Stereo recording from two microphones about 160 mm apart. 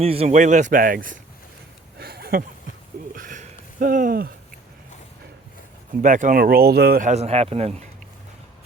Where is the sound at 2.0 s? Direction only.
75° right (ahead or behind).